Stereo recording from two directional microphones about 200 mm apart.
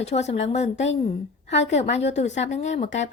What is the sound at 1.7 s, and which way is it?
A woman's voice, 35° left (ahead or behind).